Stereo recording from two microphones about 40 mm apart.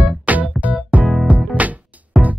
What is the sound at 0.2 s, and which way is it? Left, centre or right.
Music, right.